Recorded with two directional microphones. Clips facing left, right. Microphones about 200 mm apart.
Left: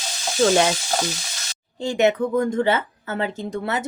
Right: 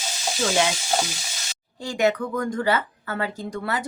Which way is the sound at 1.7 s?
25° left (ahead or behind).